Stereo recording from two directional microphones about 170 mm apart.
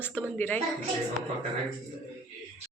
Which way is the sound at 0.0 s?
10° left (ahead or behind).